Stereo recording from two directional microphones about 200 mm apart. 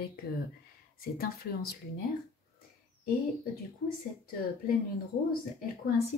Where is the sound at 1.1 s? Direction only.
50° left (ahead or behind).